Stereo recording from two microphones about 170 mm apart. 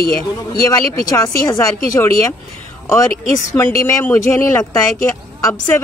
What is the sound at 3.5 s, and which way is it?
Speech, 15° left (ahead or behind).